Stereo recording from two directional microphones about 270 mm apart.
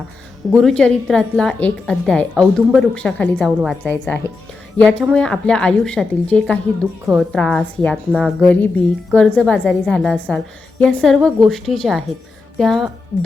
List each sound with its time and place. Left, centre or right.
0.5 s a woman's voice: centre